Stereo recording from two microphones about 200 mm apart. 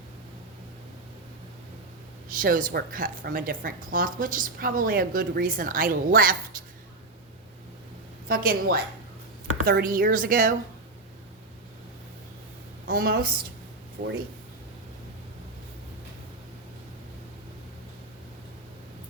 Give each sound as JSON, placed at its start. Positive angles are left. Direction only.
{"t": 2.3, "sound": "a woman's voice", "side_deg": -45}
{"t": 8.3, "sound": "a woman's voice", "side_deg": -45}
{"t": 12.9, "sound": "a woman's voice", "side_deg": -45}
{"t": 14.0, "sound": "speech", "side_deg": -30}